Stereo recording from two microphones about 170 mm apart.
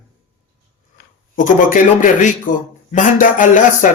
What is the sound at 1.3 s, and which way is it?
A man's voice, 50° left (ahead or behind).